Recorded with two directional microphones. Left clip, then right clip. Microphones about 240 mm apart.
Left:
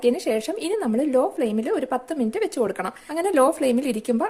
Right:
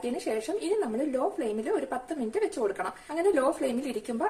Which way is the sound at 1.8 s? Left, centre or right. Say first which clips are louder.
Left 7 dB; left.